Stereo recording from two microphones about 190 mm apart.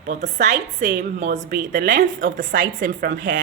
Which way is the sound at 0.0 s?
40° right (ahead or behind).